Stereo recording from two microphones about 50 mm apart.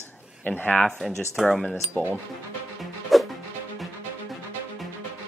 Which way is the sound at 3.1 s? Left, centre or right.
Centre.